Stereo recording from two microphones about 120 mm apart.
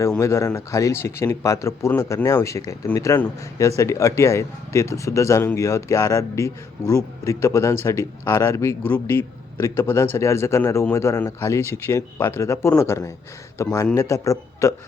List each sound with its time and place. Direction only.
0.2 s a man's voice: 25° left (ahead or behind)